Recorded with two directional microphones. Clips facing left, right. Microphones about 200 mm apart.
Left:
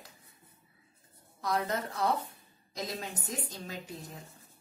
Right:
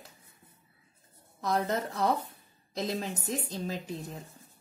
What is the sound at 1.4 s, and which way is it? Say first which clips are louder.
Speech: right 3 dB; 35° right (ahead or behind).